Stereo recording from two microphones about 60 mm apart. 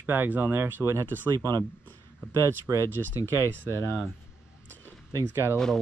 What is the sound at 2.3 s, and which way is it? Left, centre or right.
Speech, right.